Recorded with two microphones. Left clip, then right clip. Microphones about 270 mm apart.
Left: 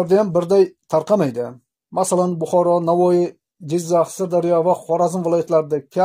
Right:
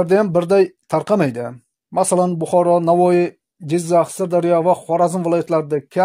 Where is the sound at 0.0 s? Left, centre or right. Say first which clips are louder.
Right 1 dB; right.